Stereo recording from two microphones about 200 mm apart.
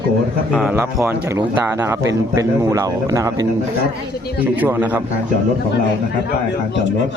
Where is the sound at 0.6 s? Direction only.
10° right (ahead or behind).